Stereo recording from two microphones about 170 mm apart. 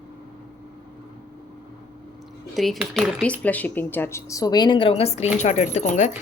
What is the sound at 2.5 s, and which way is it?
Speech, centre (ahead or behind).